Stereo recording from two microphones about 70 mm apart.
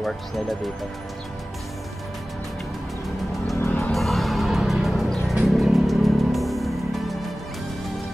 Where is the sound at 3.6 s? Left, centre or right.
Left.